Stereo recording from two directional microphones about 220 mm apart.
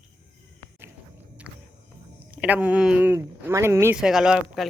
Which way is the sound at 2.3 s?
5° right (ahead or behind).